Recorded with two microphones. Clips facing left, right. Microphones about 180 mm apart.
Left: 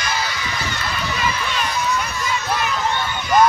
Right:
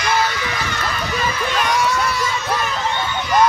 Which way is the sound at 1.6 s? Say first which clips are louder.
Right 5 dB; 90° right.